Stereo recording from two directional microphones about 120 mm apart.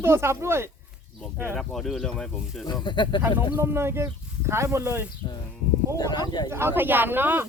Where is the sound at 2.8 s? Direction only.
40° left (ahead or behind).